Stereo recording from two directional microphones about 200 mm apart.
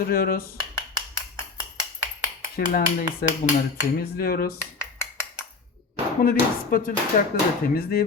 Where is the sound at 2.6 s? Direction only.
50° left (ahead or behind).